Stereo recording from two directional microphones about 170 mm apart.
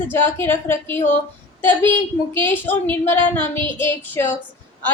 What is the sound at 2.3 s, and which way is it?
A woman's voice, 10° left (ahead or behind).